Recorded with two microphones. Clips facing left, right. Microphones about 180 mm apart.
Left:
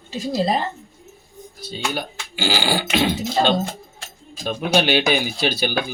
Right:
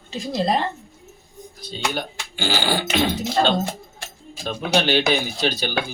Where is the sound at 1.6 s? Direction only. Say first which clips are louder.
Even; 5° left (ahead or behind).